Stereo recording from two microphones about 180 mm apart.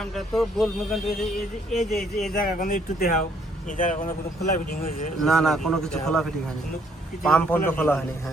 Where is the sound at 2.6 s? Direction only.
45° left (ahead or behind).